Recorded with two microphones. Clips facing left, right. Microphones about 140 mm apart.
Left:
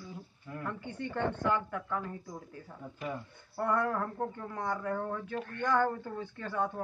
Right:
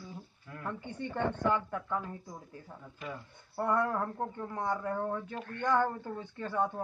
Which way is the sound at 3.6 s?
20° right (ahead or behind).